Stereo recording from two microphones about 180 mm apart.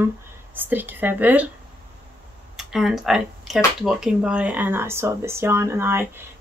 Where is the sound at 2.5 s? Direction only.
Centre (ahead or behind).